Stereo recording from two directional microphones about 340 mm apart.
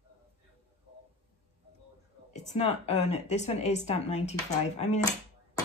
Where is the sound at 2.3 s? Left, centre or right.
Centre.